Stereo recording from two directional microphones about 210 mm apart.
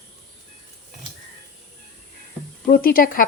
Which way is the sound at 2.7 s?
45° left (ahead or behind).